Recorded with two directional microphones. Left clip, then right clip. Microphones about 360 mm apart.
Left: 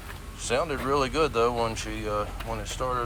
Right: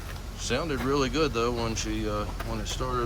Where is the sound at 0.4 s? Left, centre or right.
Centre.